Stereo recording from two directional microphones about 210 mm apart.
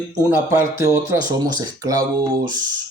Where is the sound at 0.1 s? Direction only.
15° right (ahead or behind).